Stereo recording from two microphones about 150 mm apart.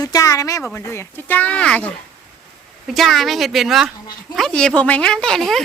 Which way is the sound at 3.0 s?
Centre (ahead or behind).